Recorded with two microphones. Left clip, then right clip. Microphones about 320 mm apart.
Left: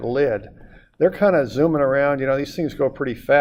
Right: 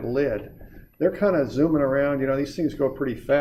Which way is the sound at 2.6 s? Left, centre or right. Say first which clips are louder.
Left 1 dB; left.